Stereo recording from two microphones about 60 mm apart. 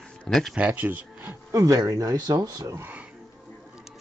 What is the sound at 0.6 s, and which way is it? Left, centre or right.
Speech, right.